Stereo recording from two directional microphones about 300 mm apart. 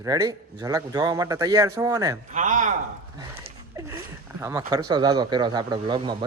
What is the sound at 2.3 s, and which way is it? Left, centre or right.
Speech, right.